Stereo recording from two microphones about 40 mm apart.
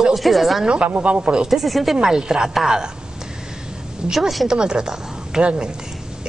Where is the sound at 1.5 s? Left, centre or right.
Centre.